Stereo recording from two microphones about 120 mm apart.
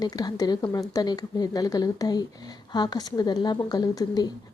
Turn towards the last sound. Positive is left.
turn(degrees=30)  # may be behind; listen again after turning